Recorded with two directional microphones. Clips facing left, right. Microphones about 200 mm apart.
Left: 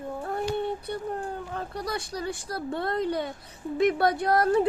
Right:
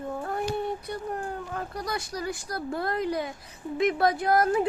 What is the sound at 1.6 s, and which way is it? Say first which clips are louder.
Speech: left 1 dB; 30° left (ahead or behind).